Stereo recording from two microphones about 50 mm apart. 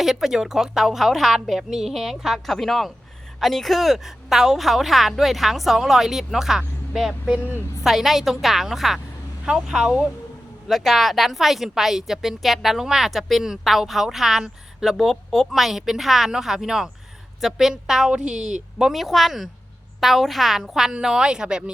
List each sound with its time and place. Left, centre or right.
0.0 s a woman's voice: centre
7.9 s a woman's voice: centre
9.5 s a woman's voice: centre
10.7 s a woman's voice: centre